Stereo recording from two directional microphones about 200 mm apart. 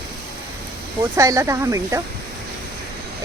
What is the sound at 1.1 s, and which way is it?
Speech, 15° right (ahead or behind).